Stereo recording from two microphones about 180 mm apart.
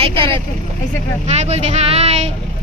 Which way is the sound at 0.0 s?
30° right (ahead or behind).